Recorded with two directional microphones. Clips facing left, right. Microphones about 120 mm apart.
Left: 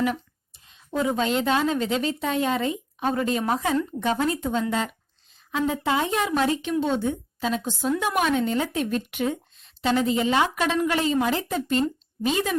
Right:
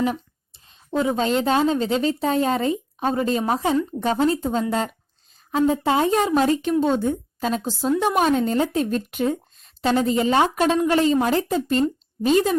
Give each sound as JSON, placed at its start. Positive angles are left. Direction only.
{"t": 0.9, "sound": "speech", "side_deg": -30}